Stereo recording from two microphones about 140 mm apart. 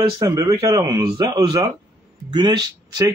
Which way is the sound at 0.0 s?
25° right (ahead or behind).